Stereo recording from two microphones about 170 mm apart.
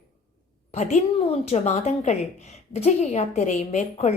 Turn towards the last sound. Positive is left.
turn(degrees=40)  # may be behind; listen again after turning